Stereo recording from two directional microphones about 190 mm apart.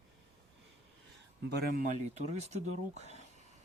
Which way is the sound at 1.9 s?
35° right (ahead or behind).